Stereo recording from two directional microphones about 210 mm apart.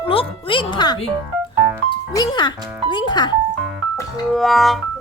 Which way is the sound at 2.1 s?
20° left (ahead or behind).